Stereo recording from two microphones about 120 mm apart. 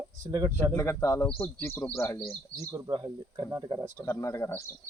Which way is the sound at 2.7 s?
30° right (ahead or behind).